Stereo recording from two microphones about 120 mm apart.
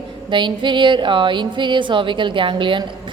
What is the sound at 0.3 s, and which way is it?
A woman's voice, 40° right (ahead or behind).